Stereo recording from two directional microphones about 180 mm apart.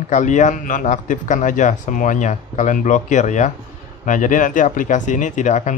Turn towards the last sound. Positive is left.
turn(degrees=45)  # may be behind; listen again after turning